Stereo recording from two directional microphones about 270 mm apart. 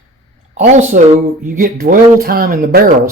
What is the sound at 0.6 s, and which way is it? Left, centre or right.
Speech, right.